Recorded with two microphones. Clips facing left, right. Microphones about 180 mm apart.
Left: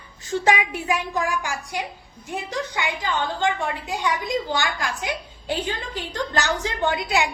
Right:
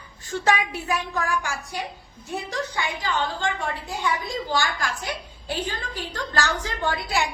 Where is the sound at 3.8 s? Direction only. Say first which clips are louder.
Left 2 dB; 20° left (ahead or behind).